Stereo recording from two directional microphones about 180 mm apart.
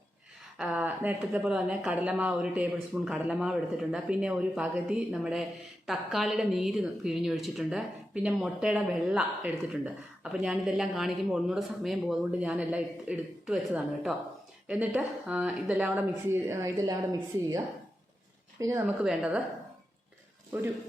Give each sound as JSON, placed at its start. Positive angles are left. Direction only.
{"t": 0.6, "sound": "a woman's voice", "side_deg": -5}
{"t": 18.6, "sound": "speech", "side_deg": -15}
{"t": 19.0, "sound": "a woman's voice", "side_deg": -5}